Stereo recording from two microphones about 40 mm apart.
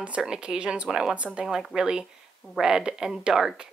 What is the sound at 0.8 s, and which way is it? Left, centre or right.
Speech, centre.